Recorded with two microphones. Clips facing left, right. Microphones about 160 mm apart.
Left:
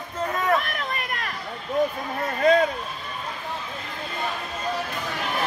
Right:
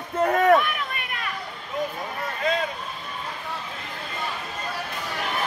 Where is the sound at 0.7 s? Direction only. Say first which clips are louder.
Left 2 dB; 40° left (ahead or behind).